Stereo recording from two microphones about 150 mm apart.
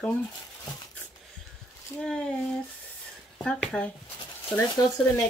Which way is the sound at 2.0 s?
5° left (ahead or behind).